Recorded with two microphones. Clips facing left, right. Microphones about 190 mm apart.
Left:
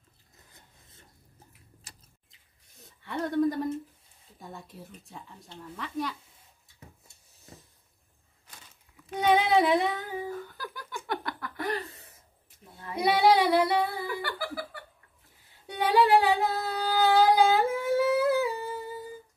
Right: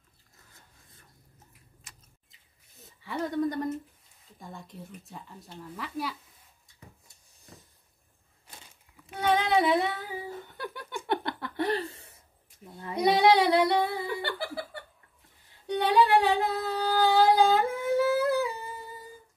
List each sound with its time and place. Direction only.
0.5 s filing: 20° left (ahead or behind)
1.9 s squish: 35° left (ahead or behind)
2.8 s speech: centre (ahead or behind)
9.1 s child singing: 10° left (ahead or behind); by 10.2 s 5° right (ahead or behind)
10.3 s a sound: 25° right (ahead or behind)
12.9 s female singing: 5° left (ahead or behind)
14.2 s laughter: 25° right (ahead or behind)
15.6 s music: 5° left (ahead or behind)